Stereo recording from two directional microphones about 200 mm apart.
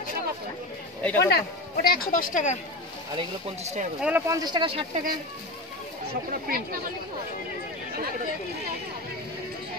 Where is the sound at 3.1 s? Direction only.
35° right (ahead or behind).